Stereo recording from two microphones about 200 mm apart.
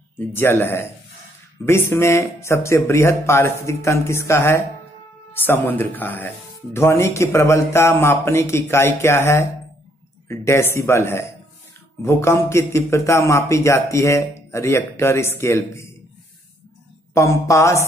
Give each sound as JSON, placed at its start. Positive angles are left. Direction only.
{"t": 0.2, "sound": "speech", "side_deg": 10}
{"t": 17.1, "sound": "speech", "side_deg": 15}